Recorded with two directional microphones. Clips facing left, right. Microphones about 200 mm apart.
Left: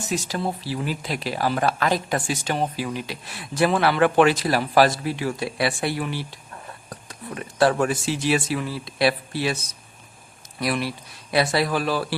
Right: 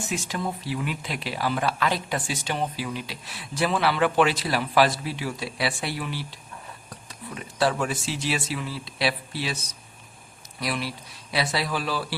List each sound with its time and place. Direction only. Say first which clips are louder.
0.1 s speech: left 5 dB; 35° left (ahead or behind)
10.6 s speech: left 5 dB; 50° left (ahead or behind)